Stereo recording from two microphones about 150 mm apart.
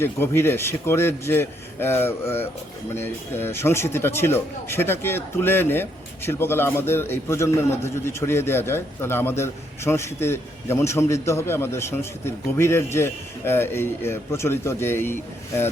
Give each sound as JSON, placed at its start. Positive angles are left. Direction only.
{"t": 0.0, "sound": "speech", "side_deg": 15}